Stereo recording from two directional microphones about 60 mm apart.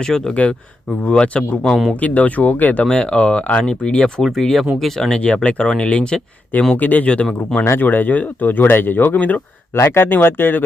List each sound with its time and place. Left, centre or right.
0.0 s speech: centre
1.6 s speech: centre
2.0 s speech: left
2.8 s speech: centre
4.2 s speech: centre
6.7 s speech: left
7.8 s speech: left
9.7 s speech: left